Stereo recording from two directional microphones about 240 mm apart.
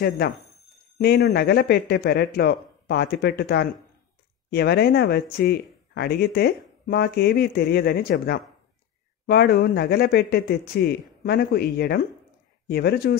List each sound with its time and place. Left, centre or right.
0.9 s speech: left